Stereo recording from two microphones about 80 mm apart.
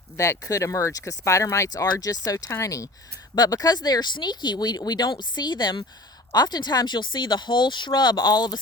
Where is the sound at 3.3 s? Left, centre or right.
Left.